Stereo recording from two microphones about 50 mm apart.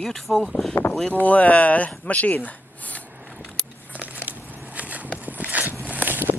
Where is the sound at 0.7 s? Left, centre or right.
Left.